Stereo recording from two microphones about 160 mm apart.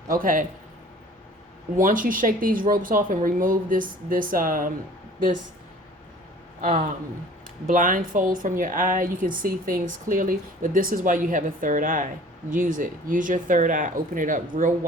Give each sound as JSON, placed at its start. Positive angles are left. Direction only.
{"t": 0.1, "sound": "speech", "side_deg": -60}
{"t": 1.8, "sound": "speech", "side_deg": -60}
{"t": 6.6, "sound": "speech", "side_deg": -60}